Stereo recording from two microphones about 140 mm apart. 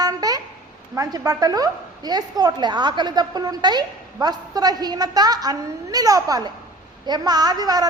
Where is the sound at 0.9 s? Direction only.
25° right (ahead or behind).